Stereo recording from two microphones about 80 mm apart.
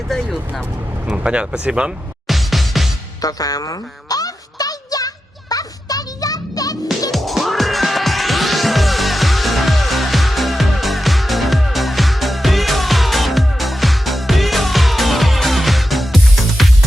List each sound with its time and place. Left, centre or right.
1.0 s speech: centre
2.2 s music: centre
3.2 s a sound: left
7.1 s music: centre